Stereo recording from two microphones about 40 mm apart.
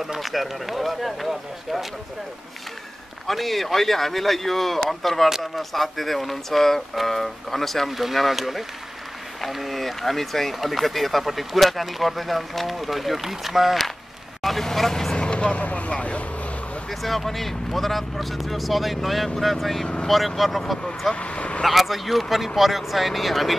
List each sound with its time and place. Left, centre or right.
0.0 s speech: centre
3.3 s speech: centre
14.4 s vehicle: centre
15.2 s speech: left
17.0 s speech: centre
21.1 s speech: left
21.6 s speech: centre